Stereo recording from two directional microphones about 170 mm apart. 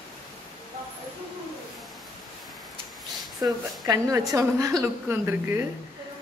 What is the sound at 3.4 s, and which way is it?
A woman's voice, 20° right (ahead or behind).